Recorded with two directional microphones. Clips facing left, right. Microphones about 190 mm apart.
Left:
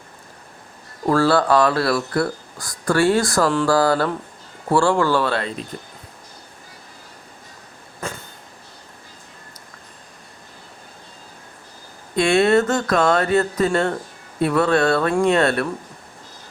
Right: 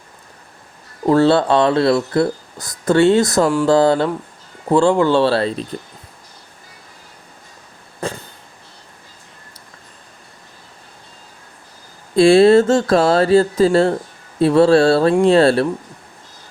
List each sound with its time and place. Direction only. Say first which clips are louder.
1.0 s speech: right 4 dB; 20° right (ahead or behind)
12.1 s speech: right 7 dB; 30° right (ahead or behind)